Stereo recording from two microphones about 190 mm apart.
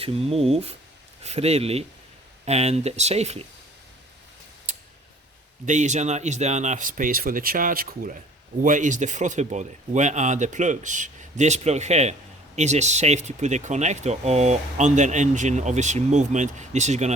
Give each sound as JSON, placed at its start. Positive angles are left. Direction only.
{"t": 0.0, "sound": "speech", "side_deg": -30}
{"t": 5.6, "sound": "speech", "side_deg": -40}